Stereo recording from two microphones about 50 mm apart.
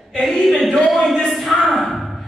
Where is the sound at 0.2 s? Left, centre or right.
Centre.